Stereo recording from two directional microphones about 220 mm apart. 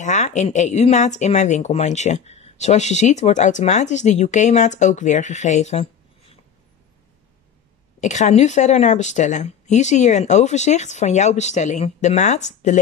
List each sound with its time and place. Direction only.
0.0 s speech: 35° left (ahead or behind)
8.0 s speech: 30° left (ahead or behind)